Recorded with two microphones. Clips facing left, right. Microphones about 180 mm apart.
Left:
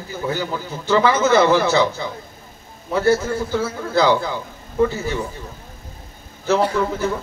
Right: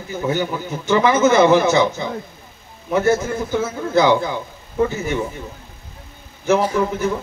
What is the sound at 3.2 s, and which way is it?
A man's voice, 20° right (ahead or behind).